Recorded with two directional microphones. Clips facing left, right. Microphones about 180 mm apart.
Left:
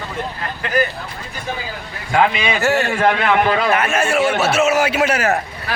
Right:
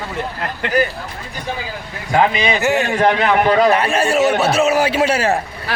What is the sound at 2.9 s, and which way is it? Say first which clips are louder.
A man's voice: right 1 dB; 35° right (ahead or behind).